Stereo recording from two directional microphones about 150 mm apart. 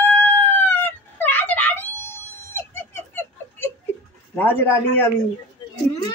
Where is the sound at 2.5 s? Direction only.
15° left (ahead or behind).